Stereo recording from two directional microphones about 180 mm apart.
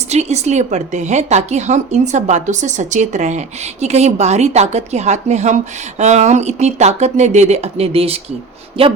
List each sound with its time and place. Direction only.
0.1 s a woman's voice: 35° right (ahead or behind)